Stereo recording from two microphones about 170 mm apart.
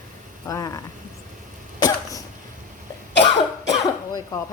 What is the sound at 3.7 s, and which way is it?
Cough, 20° left (ahead or behind).